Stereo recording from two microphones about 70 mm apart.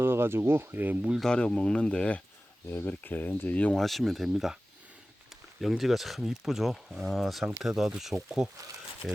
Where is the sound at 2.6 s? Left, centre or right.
Left.